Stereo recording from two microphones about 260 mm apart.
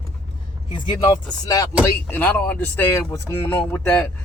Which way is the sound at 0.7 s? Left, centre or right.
Centre.